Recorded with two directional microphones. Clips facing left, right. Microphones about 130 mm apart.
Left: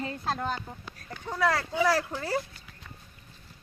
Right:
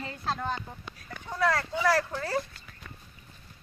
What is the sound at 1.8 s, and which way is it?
Speech, 10° left (ahead or behind).